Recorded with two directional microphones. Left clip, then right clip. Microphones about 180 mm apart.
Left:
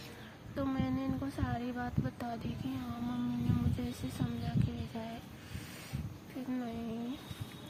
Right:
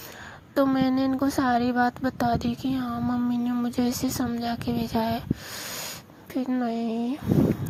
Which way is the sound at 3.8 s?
50° right (ahead or behind).